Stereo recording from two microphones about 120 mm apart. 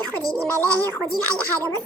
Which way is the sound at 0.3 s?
15° left (ahead or behind).